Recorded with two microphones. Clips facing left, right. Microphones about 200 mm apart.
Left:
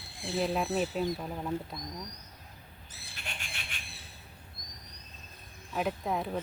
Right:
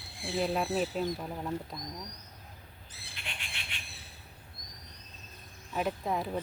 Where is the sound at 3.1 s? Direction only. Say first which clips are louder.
Left 1 dB; 45° left (ahead or behind).